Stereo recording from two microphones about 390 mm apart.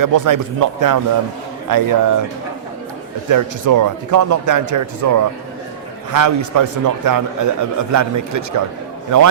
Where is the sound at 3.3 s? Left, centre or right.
Right.